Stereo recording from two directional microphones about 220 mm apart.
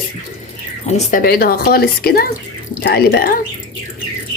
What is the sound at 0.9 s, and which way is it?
Speech, 30° left (ahead or behind).